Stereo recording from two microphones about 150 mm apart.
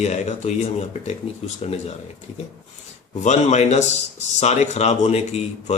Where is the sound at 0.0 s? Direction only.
50° left (ahead or behind).